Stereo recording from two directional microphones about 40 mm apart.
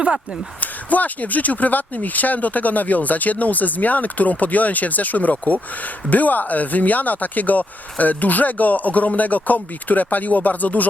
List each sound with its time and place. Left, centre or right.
0.6 s speech: left